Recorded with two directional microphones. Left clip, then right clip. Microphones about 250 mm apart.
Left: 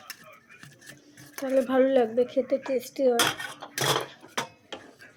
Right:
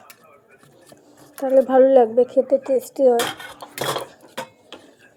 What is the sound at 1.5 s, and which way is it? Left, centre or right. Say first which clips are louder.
Speech: right 9 dB; centre.